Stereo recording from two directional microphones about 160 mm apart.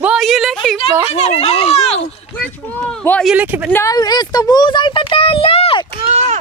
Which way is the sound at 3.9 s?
25° left (ahead or behind).